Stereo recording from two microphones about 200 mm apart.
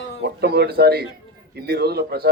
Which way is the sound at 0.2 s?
55° right (ahead or behind).